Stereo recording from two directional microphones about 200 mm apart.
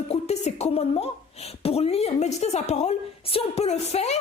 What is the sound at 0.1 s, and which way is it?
Speech, 35° left (ahead or behind).